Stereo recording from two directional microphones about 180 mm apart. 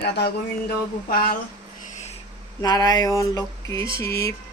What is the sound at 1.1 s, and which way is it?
Speech, 55° left (ahead or behind).